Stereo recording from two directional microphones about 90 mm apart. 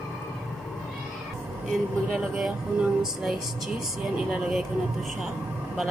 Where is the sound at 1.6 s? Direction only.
Centre (ahead or behind).